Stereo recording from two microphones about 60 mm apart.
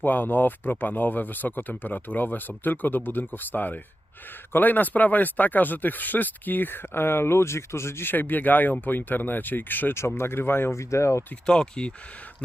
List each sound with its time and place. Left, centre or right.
0.0 s speech: left
8.1 s speech: left
11.4 s speech: centre